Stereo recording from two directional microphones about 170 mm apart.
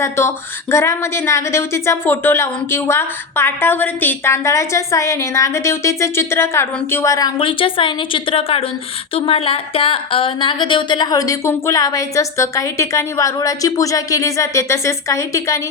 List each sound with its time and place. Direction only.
0.0 s a woman's voice: 15° left (ahead or behind)